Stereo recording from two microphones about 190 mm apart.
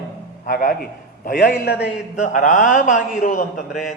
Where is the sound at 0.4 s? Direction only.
50° left (ahead or behind).